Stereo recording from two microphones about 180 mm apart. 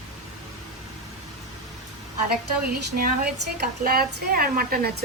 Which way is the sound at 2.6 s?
60° right (ahead or behind).